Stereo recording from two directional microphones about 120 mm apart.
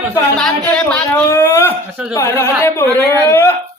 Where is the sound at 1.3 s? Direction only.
20° left (ahead or behind).